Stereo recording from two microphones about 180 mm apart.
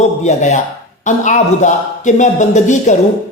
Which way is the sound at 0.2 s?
40° left (ahead or behind).